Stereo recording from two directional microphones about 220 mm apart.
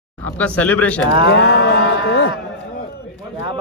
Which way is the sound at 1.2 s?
50° left (ahead or behind).